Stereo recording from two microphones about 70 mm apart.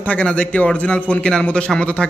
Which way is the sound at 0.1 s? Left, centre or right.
Centre.